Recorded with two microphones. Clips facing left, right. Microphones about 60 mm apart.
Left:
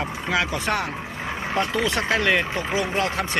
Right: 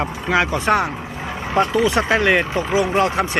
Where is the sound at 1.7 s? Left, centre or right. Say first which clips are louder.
Right 6 dB; centre.